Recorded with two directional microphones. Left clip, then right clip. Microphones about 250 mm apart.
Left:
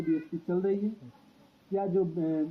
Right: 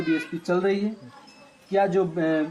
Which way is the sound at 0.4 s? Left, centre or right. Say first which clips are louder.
Right 8 dB; right.